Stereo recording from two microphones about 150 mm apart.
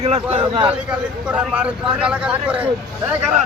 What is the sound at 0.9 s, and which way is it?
Speech, 5° right (ahead or behind).